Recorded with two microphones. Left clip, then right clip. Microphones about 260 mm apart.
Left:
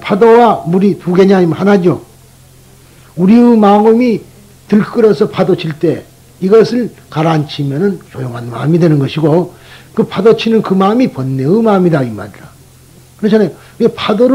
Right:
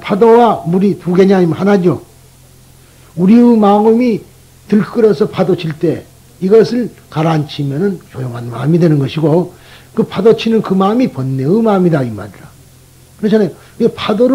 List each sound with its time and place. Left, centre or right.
0.0 s a man's voice: right
3.2 s a man's voice: right